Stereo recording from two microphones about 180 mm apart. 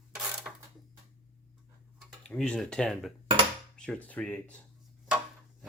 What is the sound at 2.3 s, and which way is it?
Speech, 5° left (ahead or behind).